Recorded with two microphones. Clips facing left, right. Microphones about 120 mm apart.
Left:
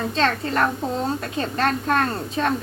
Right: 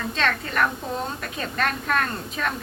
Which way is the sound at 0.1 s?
30° left (ahead or behind).